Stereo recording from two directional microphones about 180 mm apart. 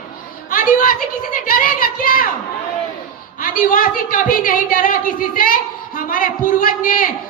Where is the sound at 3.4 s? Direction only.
50° left (ahead or behind).